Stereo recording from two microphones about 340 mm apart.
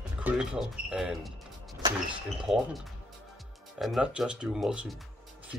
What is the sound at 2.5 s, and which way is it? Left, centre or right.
Speech, centre.